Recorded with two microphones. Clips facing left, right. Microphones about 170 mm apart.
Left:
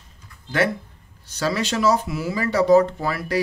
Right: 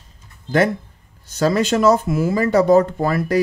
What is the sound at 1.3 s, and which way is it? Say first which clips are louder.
Speech: right 6 dB; 50° right (ahead or behind).